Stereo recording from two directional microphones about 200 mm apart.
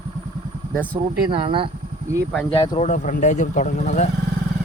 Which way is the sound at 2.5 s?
25° left (ahead or behind).